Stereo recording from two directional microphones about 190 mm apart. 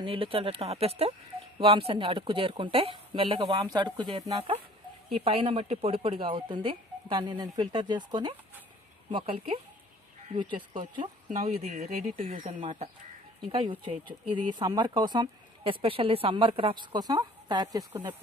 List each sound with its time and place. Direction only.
0.0 s speech: 30° right (ahead or behind)
10.8 s speech: 40° right (ahead or behind); by 18.1 s 20° right (ahead or behind)